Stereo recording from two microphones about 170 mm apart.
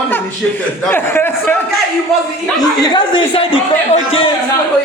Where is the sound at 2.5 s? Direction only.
25° left (ahead or behind).